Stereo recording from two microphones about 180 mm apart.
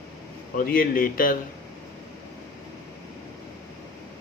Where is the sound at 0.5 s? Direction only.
50° left (ahead or behind).